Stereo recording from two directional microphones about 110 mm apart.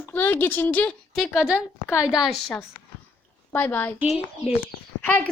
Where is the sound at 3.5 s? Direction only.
20° left (ahead or behind).